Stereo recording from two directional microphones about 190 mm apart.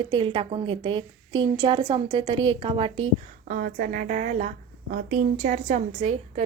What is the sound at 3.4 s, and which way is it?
A woman's voice, 45° right (ahead or behind).